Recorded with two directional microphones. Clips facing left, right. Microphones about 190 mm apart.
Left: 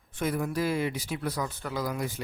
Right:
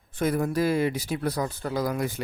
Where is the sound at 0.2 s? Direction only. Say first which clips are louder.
Right 4 dB; 40° right (ahead or behind).